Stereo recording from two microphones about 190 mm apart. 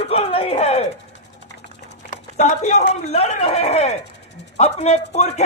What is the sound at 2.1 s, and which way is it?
Speech, 35° left (ahead or behind).